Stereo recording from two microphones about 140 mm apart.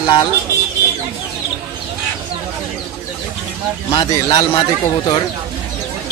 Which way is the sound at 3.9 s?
30° left (ahead or behind).